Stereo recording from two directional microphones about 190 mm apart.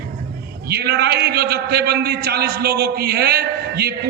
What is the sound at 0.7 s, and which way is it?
A man's voice, 60° right (ahead or behind).